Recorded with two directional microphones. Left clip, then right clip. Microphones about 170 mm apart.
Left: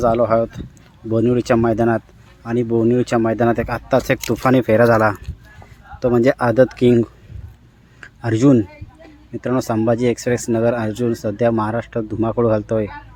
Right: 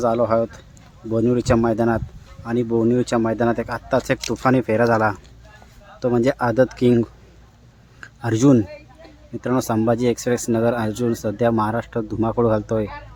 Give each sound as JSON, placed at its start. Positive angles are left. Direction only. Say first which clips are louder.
{"t": 0.0, "sound": "speech", "louder": "left 3 dB", "side_deg": 15}